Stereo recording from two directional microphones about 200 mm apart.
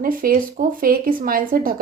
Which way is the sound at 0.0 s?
45° right (ahead or behind).